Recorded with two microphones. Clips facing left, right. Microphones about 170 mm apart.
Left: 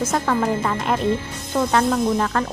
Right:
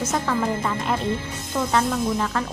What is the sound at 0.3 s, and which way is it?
Speech, 55° left (ahead or behind).